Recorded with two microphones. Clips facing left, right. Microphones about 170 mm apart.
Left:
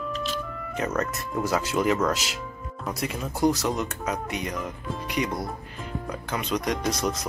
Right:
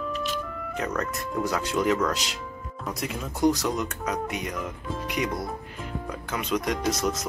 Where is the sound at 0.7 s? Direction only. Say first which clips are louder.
Left 2 dB; 5° left (ahead or behind).